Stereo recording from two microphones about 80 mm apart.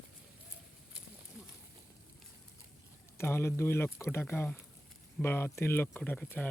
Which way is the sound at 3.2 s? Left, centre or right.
Left.